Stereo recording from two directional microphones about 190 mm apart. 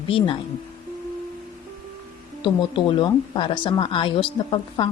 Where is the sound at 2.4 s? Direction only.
25° left (ahead or behind).